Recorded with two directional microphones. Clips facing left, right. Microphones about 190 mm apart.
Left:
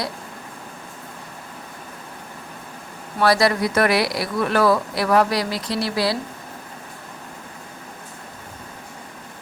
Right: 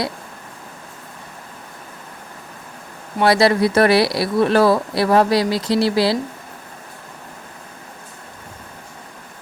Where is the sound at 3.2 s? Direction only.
25° right (ahead or behind).